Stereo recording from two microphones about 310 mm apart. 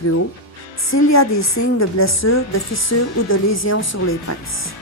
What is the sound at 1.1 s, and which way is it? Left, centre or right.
Speech, left.